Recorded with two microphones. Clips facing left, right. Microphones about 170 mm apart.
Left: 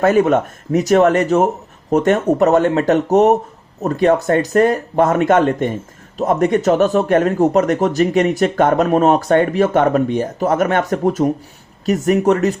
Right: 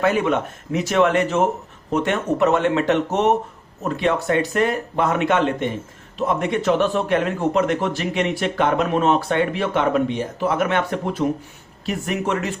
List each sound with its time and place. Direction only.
0.0 s speech: 45° left (ahead or behind)